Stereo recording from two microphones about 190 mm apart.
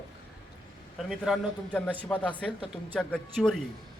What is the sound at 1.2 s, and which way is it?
Speech, 5° left (ahead or behind).